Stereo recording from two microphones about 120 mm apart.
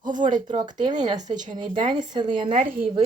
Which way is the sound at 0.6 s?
35° right (ahead or behind).